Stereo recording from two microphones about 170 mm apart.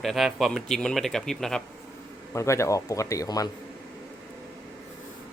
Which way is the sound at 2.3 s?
15° left (ahead or behind).